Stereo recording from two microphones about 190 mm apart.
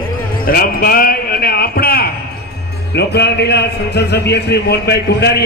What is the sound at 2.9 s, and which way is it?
A man's voice, 60° left (ahead or behind).